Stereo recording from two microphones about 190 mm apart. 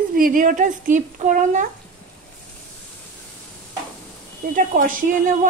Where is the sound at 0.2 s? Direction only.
45° right (ahead or behind).